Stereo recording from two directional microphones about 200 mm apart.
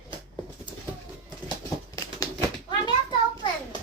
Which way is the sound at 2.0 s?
20° left (ahead or behind).